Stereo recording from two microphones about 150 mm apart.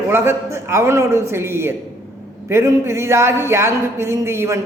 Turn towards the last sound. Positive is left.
turn(degrees=-20)  # may be behind; listen again after turning